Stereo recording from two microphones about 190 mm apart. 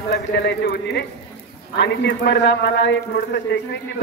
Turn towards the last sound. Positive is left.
turn(degrees=65)  # may be behind; listen again after turning